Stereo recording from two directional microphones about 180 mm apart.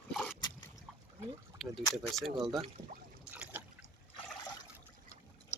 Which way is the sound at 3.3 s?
10° right (ahead or behind).